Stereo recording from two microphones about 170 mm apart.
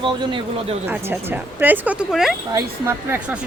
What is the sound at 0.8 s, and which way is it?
Speech, 10° right (ahead or behind).